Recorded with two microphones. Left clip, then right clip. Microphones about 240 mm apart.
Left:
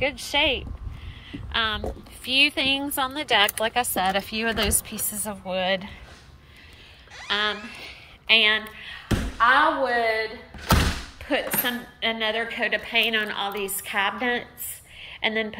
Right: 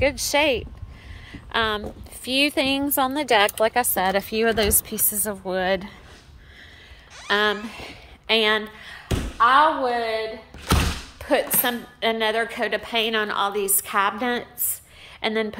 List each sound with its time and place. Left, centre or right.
0.0 s a woman's voice: centre
1.3 s a sound: right
2.2 s speech: right
7.2 s speech: right
9.4 s a woman's voice: centre
11.1 s a woman's voice: centre
15.0 s a sound: centre